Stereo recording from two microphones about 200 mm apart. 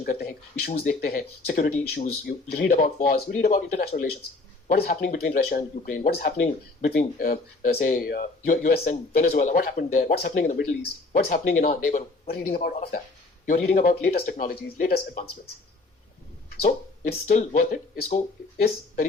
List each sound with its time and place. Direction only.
0.0 s speech: 45° left (ahead or behind)
4.7 s speech: 50° left (ahead or behind)
16.6 s speech: 45° left (ahead or behind)